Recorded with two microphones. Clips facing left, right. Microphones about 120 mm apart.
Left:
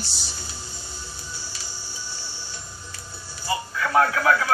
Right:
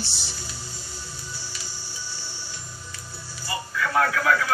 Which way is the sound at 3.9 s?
30° left (ahead or behind).